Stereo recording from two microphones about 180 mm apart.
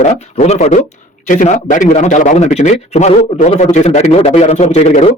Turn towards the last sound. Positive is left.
turn(degrees=35)  # may be behind; listen again after turning